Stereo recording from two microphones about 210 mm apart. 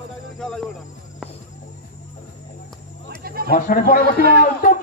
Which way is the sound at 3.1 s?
45° right (ahead or behind).